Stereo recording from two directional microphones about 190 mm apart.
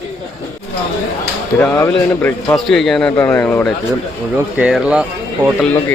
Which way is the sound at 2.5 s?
Centre (ahead or behind).